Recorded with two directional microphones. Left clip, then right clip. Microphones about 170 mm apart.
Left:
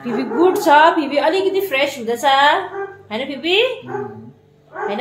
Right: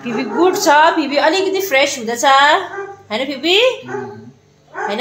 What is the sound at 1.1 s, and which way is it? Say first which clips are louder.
A woman's voice: right 2 dB; 35° right (ahead or behind).